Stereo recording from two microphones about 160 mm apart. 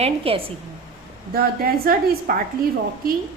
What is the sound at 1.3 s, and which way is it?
A woman's voice, 70° right (ahead or behind).